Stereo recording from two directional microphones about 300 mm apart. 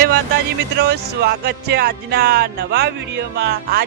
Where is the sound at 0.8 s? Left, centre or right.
Right.